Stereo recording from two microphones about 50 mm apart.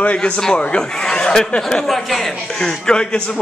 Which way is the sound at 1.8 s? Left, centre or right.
Centre.